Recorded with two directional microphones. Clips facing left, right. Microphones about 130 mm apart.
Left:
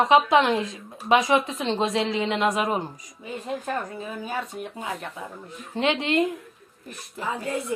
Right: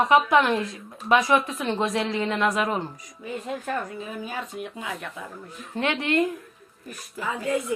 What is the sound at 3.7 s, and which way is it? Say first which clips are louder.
Speech: even; 40° left (ahead or behind).